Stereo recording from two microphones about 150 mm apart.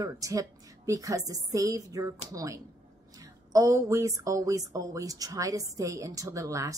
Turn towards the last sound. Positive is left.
turn(degrees=-20)  # may be behind; listen again after turning